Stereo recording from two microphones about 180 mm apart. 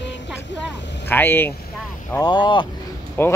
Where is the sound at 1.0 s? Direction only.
10° left (ahead or behind).